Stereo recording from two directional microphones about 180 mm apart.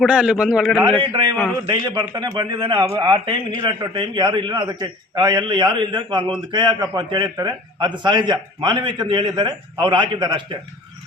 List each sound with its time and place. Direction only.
0.0 s a man's voice: 5° right (ahead or behind)
1.0 s a man's voice: 25° right (ahead or behind)